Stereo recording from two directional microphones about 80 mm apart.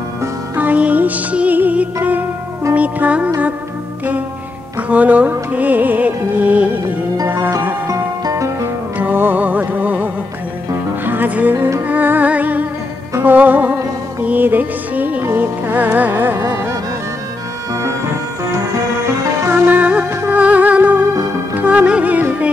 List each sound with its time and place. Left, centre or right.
0.6 s music: centre
4.7 s music: centre
7.9 s music: right
8.9 s music: right
19.4 s music: right